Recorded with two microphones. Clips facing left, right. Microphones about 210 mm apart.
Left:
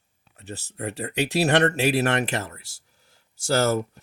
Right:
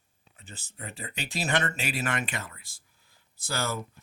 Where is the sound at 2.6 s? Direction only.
75° left (ahead or behind).